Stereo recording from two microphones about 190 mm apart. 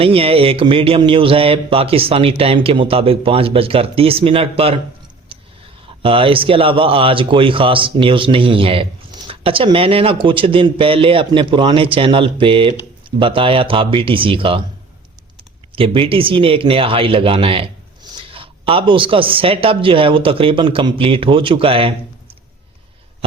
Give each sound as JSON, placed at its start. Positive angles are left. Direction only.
{"t": 0.0, "sound": "speech", "side_deg": -30}
{"t": 5.3, "sound": "a sound", "side_deg": -30}
{"t": 6.0, "sound": "speech", "side_deg": -30}
{"t": 15.7, "sound": "speech", "side_deg": -30}